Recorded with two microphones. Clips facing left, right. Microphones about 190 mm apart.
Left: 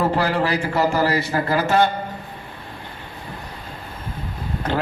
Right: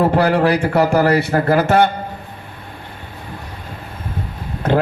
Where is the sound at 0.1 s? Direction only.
60° right (ahead or behind).